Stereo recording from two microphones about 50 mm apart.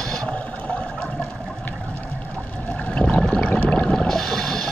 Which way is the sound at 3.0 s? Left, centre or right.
Left.